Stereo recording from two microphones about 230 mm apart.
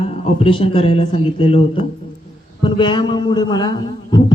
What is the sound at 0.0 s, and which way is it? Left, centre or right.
A man's voice, left.